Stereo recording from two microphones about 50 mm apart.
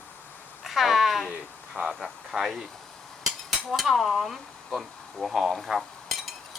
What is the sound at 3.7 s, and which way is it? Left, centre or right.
Speech, centre.